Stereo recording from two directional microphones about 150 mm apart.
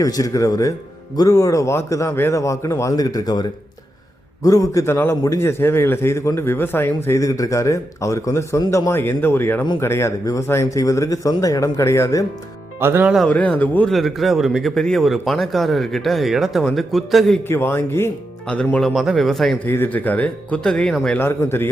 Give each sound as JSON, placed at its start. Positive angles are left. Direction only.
{"t": 0.0, "sound": "a man's voice", "side_deg": 25}
{"t": 12.8, "sound": "speech", "side_deg": -15}
{"t": 13.1, "sound": "a man's voice", "side_deg": 10}
{"t": 17.5, "sound": "a man's voice", "side_deg": 15}
{"t": 19.6, "sound": "a man's voice", "side_deg": 15}
{"t": 21.2, "sound": "a man's voice", "side_deg": 15}